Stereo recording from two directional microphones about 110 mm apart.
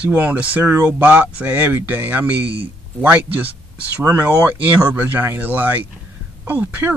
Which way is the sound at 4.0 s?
15° right (ahead or behind).